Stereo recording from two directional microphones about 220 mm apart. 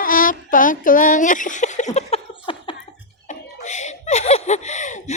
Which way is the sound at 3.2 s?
30° left (ahead or behind).